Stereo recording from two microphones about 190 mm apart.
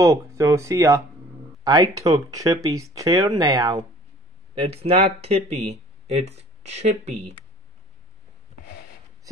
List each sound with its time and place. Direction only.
0.0 s speech: 15° right (ahead or behind)
4.6 s speech: 30° right (ahead or behind)